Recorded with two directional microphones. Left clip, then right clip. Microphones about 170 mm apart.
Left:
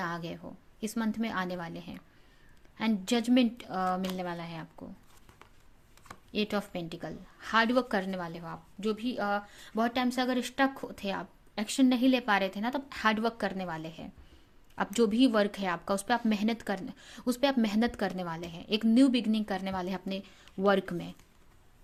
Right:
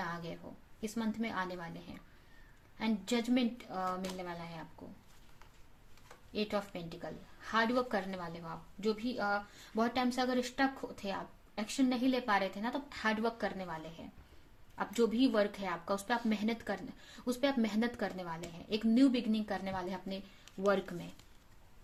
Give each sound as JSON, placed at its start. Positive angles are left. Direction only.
{"t": 0.0, "sound": "a sound", "side_deg": 55}
{"t": 0.8, "sound": "a woman's voice", "side_deg": 50}
{"t": 6.3, "sound": "a woman's voice", "side_deg": 55}